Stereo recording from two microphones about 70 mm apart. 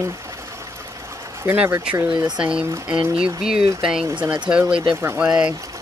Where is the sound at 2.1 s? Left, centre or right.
Right.